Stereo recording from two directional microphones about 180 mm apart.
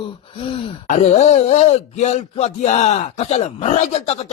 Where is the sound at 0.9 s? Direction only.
40° left (ahead or behind).